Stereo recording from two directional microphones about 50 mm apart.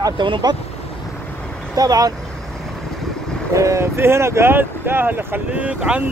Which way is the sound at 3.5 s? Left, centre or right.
Right.